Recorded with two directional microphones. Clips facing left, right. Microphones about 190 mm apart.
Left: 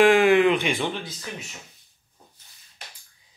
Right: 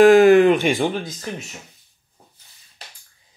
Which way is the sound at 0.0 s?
40° right (ahead or behind).